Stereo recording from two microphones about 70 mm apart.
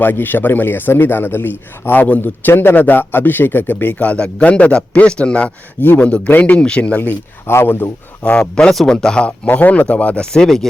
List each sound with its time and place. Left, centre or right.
0.0 s a man's voice: left
6.1 s a man's voice: centre
7.4 s speech: left
8.2 s speech: centre
9.5 s speech: left; by 10.7 s centre